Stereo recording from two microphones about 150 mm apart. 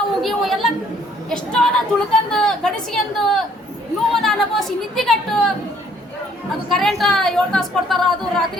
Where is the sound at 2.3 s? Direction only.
5° left (ahead or behind).